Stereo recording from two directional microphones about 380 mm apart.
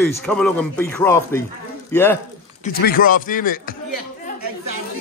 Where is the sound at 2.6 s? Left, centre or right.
Left.